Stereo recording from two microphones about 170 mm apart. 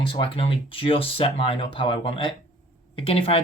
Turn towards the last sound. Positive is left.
turn(degrees=35)  # may be behind; listen again after turning